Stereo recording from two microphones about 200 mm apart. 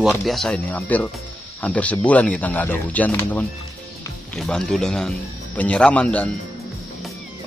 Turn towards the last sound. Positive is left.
turn(degrees=5)  # may be behind; listen again after turning